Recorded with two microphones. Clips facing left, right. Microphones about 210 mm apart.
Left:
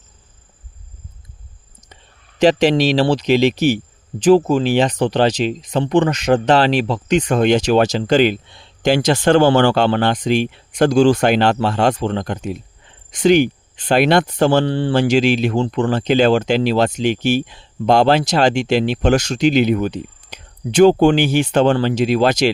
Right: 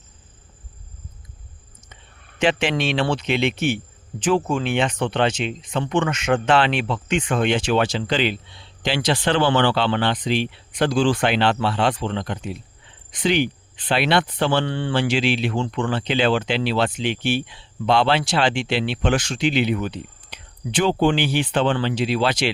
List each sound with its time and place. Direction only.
2.4 s speech: 35° left (ahead or behind)